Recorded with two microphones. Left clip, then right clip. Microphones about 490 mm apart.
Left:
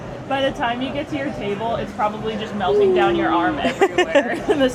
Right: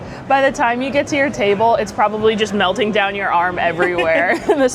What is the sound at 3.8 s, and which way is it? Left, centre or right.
Speech, left.